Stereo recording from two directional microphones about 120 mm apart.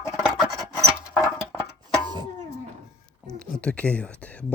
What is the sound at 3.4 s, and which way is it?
Speech, 10° left (ahead or behind).